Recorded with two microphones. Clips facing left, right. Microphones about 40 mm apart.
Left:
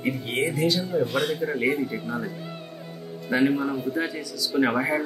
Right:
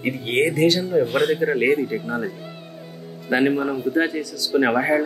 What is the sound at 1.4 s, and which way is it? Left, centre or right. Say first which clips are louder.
Speech: right 6 dB; right.